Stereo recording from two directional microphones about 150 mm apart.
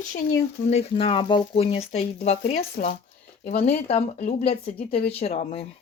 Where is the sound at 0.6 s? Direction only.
50° left (ahead or behind).